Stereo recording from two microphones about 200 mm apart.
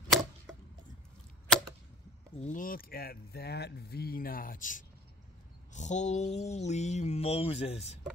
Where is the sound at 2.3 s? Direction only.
40° left (ahead or behind).